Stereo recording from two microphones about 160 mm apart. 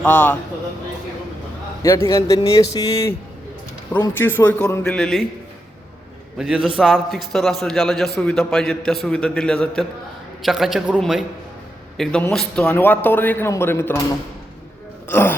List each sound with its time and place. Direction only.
0.0 s a man's voice: 10° left (ahead or behind)
1.8 s a man's voice: 20° left (ahead or behind)
6.4 s a man's voice: 5° right (ahead or behind)
12.3 s a man's voice: 5° left (ahead or behind)
15.1 s a man's voice: 10° left (ahead or behind)